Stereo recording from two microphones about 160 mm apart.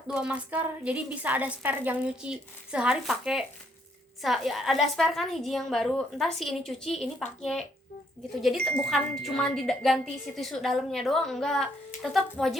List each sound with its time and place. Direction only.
0.1 s a woman's voice: 5° right (ahead or behind)